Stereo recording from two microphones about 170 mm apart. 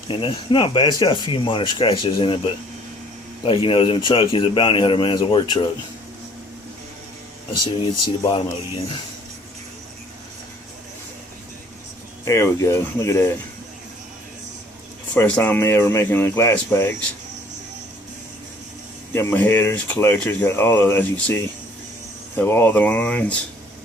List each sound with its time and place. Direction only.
0.1 s speech: 30° left (ahead or behind)
3.4 s speech: 30° left (ahead or behind)
7.6 s speech: 25° left (ahead or behind)
12.2 s speech: 15° left (ahead or behind)
15.1 s speech: 10° left (ahead or behind)
19.1 s speech: 10° left (ahead or behind)
22.4 s speech: 15° left (ahead or behind)